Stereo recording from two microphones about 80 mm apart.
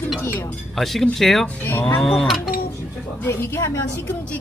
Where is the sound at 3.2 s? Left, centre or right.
Left.